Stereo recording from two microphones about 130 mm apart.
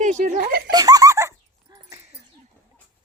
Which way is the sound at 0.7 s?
30° right (ahead or behind).